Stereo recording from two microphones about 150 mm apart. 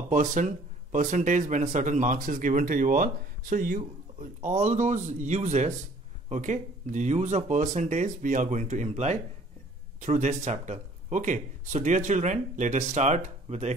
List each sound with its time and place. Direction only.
0.1 s speech: 55° right (ahead or behind)